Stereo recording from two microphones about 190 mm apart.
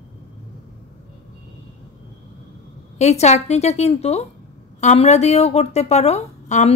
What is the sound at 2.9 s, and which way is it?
A woman's voice, 35° left (ahead or behind).